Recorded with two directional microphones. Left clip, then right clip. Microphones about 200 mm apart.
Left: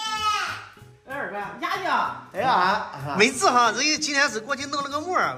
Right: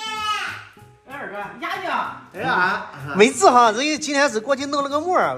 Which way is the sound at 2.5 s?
35° left (ahead or behind).